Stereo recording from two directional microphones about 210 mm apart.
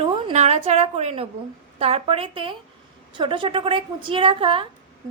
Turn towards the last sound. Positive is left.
turn(degrees=-25)  # may be behind; listen again after turning